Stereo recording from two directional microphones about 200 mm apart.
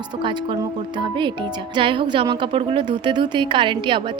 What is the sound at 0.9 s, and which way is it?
A woman's voice, 25° right (ahead or behind).